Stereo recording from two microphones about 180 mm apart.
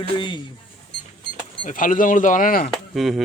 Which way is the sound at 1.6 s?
45° left (ahead or behind).